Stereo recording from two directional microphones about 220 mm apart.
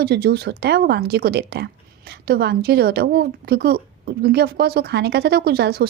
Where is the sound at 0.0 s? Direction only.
45° right (ahead or behind).